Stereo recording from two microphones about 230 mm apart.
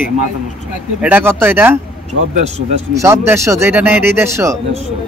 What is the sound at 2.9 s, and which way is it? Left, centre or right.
Speech, centre.